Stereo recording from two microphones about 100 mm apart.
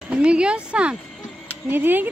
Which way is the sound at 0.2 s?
10° right (ahead or behind).